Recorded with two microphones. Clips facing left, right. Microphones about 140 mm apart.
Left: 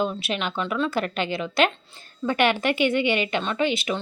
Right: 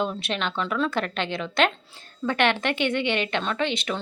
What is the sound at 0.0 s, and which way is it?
A woman's voice, 5° left (ahead or behind).